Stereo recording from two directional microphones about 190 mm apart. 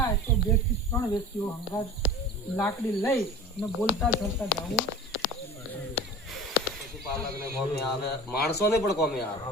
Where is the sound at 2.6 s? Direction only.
15° left (ahead or behind).